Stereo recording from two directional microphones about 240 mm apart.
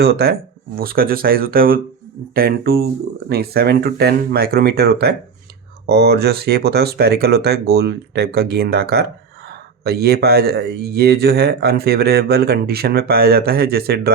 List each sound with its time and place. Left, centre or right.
0.0 s speech: right